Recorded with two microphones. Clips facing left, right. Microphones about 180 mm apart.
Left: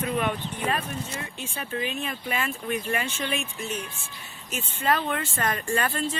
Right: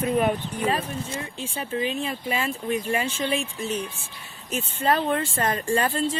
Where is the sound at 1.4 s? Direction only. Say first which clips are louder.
Right 4 dB; 30° right (ahead or behind).